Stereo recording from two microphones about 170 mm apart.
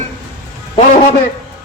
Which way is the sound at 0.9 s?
45° left (ahead or behind).